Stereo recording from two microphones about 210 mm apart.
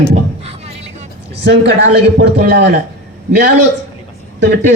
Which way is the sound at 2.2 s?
55° right (ahead or behind).